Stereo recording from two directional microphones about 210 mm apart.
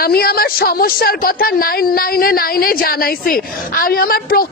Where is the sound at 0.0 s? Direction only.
45° left (ahead or behind).